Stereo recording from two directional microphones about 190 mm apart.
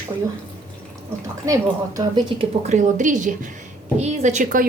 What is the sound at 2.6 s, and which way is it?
A woman's voice, 40° right (ahead or behind).